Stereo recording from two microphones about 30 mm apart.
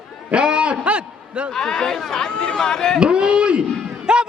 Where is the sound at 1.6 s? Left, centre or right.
Centre.